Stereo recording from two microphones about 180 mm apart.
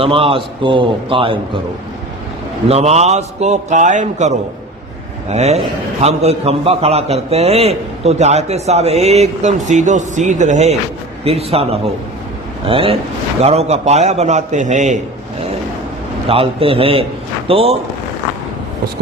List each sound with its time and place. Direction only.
0.0 s a man's voice: 30° right (ahead or behind)
2.6 s a man's voice: 35° right (ahead or behind)
16.3 s a man's voice: 30° right (ahead or behind)